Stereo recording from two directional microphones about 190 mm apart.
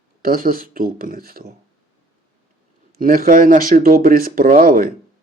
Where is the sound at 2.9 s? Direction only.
50° right (ahead or behind).